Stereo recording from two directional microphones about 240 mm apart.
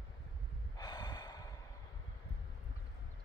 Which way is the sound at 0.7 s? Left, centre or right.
Centre.